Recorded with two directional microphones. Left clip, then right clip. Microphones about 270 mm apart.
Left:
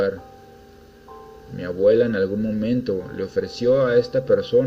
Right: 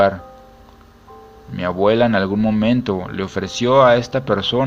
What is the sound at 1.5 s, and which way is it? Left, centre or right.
A man's voice, right.